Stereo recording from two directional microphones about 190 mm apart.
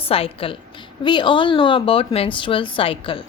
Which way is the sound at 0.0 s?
30° left (ahead or behind).